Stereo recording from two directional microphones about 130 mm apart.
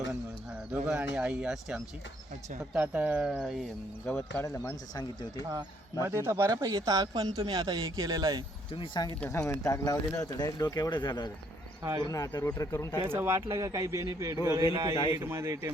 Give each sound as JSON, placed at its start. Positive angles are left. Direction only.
{"t": 0.9, "sound": "speech", "side_deg": -10}
{"t": 4.0, "sound": "speech", "side_deg": 15}
{"t": 5.5, "sound": "speech", "side_deg": -25}
{"t": 9.0, "sound": "a man's voice", "side_deg": 30}
{"t": 13.1, "sound": "speech", "side_deg": -20}
{"t": 14.9, "sound": "a man's voice", "side_deg": 35}
{"t": 15.2, "sound": "speech", "side_deg": -20}